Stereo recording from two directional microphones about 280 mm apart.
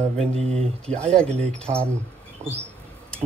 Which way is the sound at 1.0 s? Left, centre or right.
Centre.